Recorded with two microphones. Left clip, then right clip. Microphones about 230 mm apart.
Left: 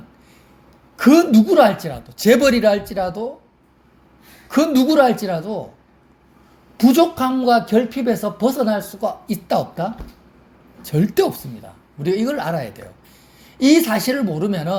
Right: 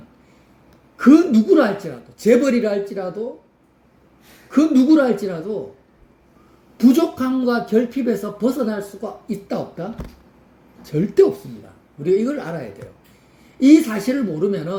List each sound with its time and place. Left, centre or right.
0.9 s a woman's voice: left
4.5 s a woman's voice: left
6.7 s a woman's voice: left
10.9 s a woman's voice: left